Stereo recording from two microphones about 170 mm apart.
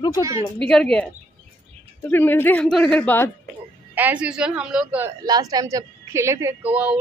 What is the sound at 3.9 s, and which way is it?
A woman's voice, 10° right (ahead or behind).